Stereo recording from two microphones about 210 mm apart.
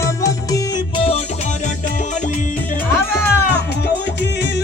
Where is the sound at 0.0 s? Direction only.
15° left (ahead or behind); by 2.4 s 35° left (ahead or behind).